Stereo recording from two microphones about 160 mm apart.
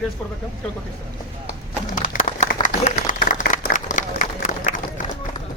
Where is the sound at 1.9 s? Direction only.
55° left (ahead or behind).